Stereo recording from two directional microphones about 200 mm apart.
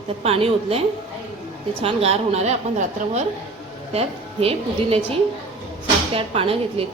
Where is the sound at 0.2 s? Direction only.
30° right (ahead or behind).